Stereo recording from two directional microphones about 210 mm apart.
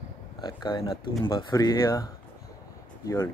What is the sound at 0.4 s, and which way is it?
Speech, 20° left (ahead or behind).